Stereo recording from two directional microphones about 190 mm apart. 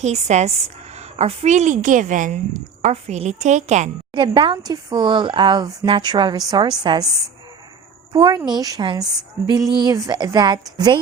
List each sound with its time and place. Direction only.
0.0 s a woman's voice: 35° right (ahead or behind)
4.1 s speech: 25° right (ahead or behind)
8.1 s speech: 20° right (ahead or behind)